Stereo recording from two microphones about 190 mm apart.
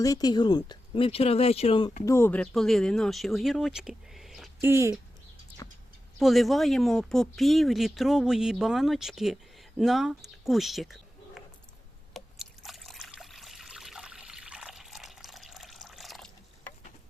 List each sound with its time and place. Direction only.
0.0 s speech: 20° left (ahead or behind)
2.0 s speech: 10° left (ahead or behind)
4.6 s speech: 15° right (ahead or behind)
5.6 s bird: 20° left (ahead or behind)
6.1 s speech: centre (ahead or behind)
12.1 s trickle: centre (ahead or behind)